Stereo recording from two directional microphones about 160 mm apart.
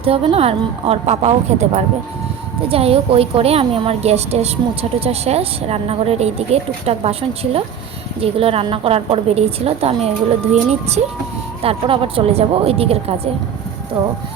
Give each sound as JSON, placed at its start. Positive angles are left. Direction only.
{"t": 0.0, "sound": "a woman's voice", "side_deg": -35}